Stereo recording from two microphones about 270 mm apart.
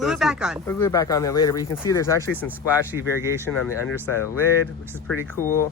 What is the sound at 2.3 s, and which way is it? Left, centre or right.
Speech, centre.